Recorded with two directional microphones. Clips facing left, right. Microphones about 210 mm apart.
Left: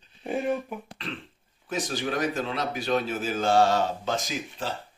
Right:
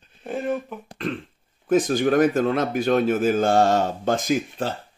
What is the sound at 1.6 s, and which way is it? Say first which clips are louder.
Speech: right 11 dB; 50° right (ahead or behind).